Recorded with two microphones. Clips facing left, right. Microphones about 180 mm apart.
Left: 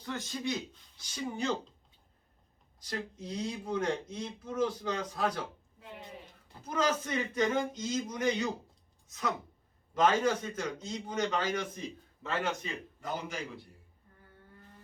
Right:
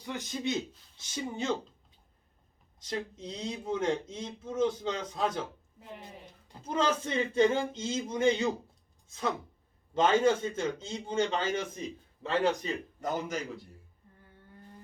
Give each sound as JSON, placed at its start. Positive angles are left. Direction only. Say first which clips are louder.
{"t": 0.0, "sound": "speech", "louder": "right 2 dB", "side_deg": -15}
{"t": 2.8, "sound": "speech", "louder": "right 3 dB", "side_deg": -20}
{"t": 6.6, "sound": "a man's voice", "louder": "right 2 dB", "side_deg": -30}